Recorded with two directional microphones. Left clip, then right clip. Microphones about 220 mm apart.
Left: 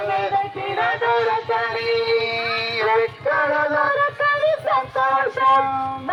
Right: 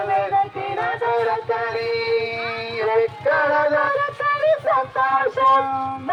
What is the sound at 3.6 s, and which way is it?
Music, 25° left (ahead or behind).